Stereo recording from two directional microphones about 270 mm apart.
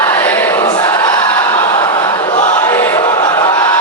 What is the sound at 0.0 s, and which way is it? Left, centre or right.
Choir, centre.